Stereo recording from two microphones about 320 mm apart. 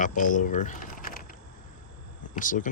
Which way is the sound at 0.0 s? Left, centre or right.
Left.